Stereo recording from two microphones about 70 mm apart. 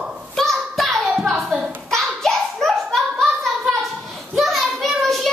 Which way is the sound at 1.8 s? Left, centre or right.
Centre.